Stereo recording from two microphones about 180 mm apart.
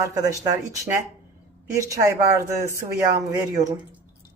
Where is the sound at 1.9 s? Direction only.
15° right (ahead or behind).